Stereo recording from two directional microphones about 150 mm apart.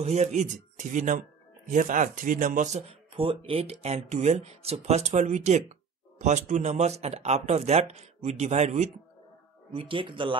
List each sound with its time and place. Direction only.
0.0 s speech: 45° right (ahead or behind)
9.7 s speech: 35° right (ahead or behind)